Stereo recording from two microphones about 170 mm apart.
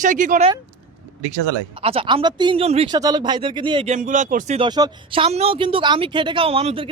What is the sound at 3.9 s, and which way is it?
Speech, 50° right (ahead or behind).